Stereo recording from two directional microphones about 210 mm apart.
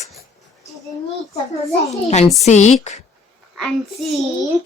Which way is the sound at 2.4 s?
35° left (ahead or behind).